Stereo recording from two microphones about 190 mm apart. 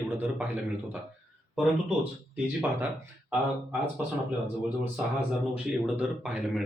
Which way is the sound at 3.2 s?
5° right (ahead or behind).